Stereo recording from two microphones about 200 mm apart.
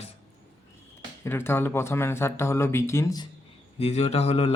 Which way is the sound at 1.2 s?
10° left (ahead or behind).